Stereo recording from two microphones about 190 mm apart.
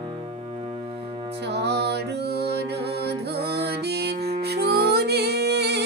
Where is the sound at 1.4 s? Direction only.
60° right (ahead or behind).